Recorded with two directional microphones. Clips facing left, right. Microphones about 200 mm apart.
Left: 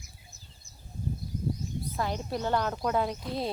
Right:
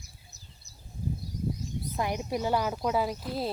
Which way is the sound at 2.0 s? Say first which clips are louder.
Right 2 dB; 15° right (ahead or behind).